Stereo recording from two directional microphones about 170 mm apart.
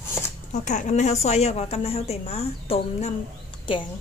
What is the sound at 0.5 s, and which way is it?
A woman's voice, 45° left (ahead or behind).